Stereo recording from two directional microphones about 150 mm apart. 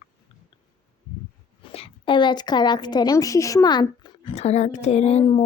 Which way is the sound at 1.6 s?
35° left (ahead or behind).